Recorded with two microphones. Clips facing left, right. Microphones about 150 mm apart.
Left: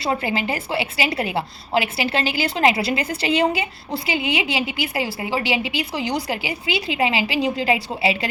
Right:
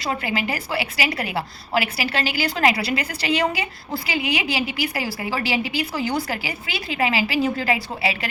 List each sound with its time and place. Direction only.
0.0 s a woman's voice: 30° left (ahead or behind)